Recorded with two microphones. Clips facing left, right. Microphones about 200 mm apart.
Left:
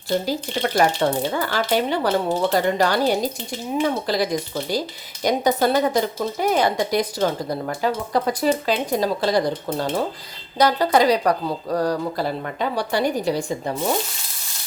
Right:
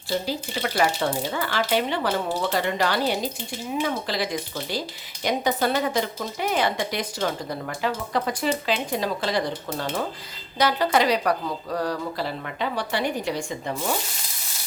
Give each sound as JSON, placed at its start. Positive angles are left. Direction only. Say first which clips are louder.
{"t": 0.3, "sound": "a woman's voice", "louder": "left 4 dB", "side_deg": 45}
{"t": 10.6, "sound": "a woman's voice", "louder": "left 4 dB", "side_deg": 40}